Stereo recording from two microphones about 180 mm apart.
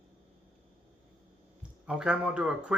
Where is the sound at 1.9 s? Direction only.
5° right (ahead or behind).